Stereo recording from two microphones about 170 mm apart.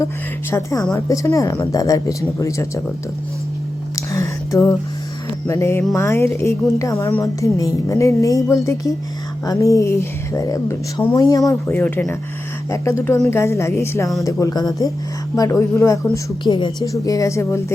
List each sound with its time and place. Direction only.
0.5 s a woman's voice: 20° left (ahead or behind)
3.9 s a sound: 20° left (ahead or behind)
5.5 s a woman's voice: 15° left (ahead or behind)